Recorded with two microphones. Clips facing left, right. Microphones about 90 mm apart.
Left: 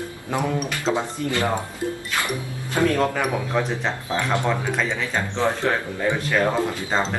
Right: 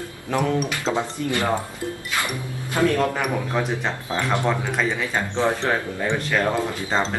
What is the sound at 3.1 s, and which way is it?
Speech, 5° right (ahead or behind).